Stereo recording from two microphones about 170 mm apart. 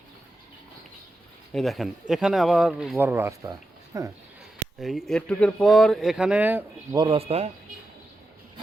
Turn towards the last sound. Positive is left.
turn(degrees=-40)  # may be behind; listen again after turning